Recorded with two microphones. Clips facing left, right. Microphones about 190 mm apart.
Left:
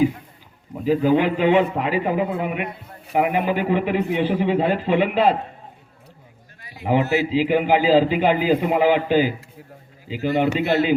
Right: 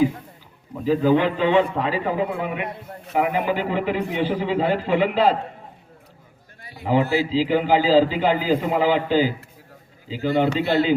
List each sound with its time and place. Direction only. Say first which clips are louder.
0.9 s a man's voice: left 1 dB; 15° left (ahead or behind)
6.8 s a man's voice: even; 20° left (ahead or behind)